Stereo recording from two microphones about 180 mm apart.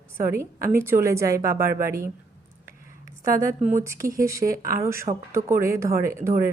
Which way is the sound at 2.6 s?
15° right (ahead or behind).